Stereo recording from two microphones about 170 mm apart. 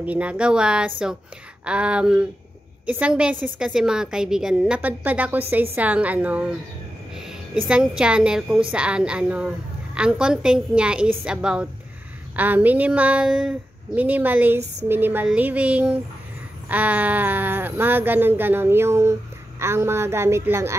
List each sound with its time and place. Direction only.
0.0 s a woman's voice: 10° right (ahead or behind)
7.6 s a woman's voice: 5° right (ahead or behind)